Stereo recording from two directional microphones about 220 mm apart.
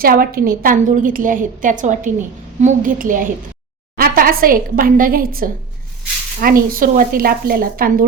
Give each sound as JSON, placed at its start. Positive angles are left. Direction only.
{"t": 0.0, "sound": "a woman's voice", "side_deg": -40}